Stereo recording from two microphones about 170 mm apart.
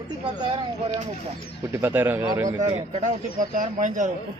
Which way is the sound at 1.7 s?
10° right (ahead or behind).